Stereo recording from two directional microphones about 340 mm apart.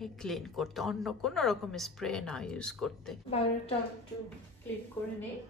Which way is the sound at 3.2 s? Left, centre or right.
Centre.